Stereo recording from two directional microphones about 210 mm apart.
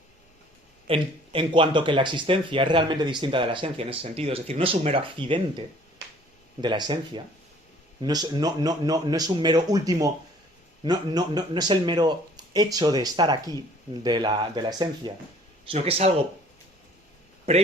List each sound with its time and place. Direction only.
0.9 s speech: 25° right (ahead or behind)
17.5 s speech: 30° right (ahead or behind)